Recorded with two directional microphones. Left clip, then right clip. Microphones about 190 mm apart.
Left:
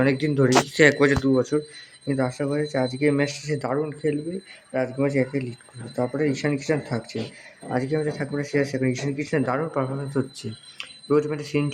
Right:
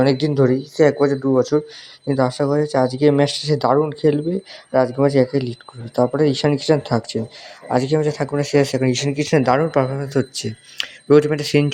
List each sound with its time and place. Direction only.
0.0 s speech: 20° right (ahead or behind)